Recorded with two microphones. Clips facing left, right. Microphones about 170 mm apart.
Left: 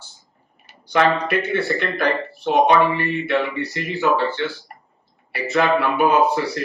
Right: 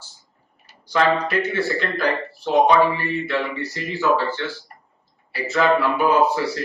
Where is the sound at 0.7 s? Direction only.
60° left (ahead or behind).